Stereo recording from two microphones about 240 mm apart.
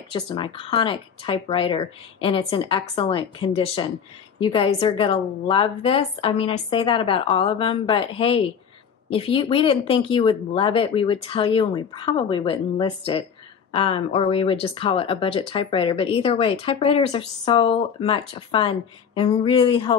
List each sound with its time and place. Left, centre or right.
0.1 s speech: left